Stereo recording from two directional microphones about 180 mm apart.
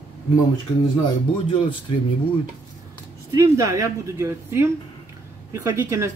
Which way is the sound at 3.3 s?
15° right (ahead or behind).